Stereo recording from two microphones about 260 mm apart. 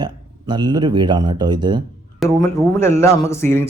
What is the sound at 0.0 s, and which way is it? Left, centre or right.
Speech, centre.